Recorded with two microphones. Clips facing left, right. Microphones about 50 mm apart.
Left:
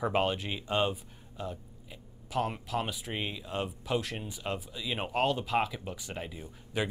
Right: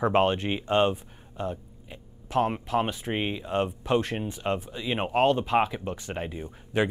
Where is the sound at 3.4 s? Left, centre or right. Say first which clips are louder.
Right 8 dB; centre.